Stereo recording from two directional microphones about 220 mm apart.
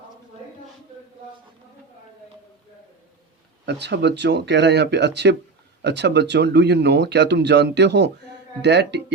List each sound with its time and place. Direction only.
3.7 s speech: 50° right (ahead or behind)